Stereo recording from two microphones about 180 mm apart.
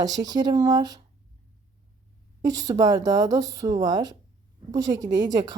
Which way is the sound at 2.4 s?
20° right (ahead or behind).